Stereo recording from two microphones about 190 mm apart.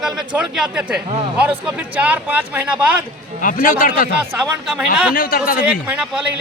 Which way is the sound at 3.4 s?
45° left (ahead or behind).